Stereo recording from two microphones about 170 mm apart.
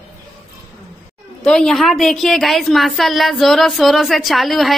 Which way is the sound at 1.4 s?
5° left (ahead or behind).